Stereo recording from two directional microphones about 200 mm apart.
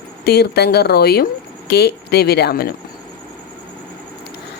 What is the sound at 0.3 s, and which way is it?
Speech, 55° left (ahead or behind).